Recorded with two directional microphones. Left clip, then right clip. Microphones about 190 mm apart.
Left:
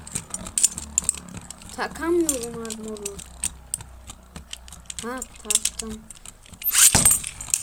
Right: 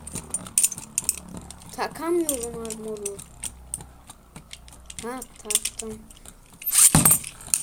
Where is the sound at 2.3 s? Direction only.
15° left (ahead or behind).